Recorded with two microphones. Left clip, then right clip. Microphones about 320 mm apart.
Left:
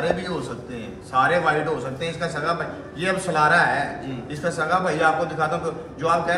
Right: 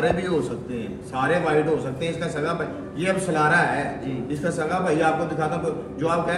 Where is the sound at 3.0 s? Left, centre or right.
Centre.